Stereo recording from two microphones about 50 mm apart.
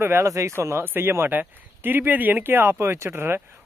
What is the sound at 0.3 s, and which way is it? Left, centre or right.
Speech, right.